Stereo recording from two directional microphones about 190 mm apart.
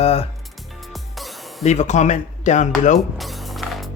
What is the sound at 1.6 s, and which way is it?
Speech, 40° left (ahead or behind).